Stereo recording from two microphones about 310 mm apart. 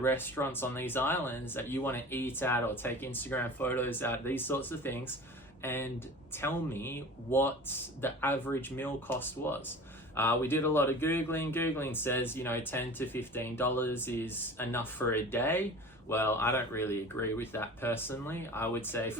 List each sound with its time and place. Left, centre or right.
0.0 s speech: centre